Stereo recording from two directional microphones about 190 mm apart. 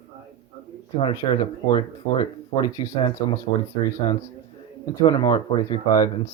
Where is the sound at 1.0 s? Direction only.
25° left (ahead or behind).